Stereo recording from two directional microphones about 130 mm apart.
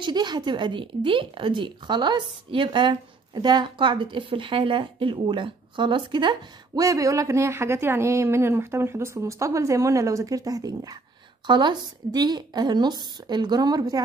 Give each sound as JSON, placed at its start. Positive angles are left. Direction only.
{"t": 0.0, "sound": "speech", "side_deg": -35}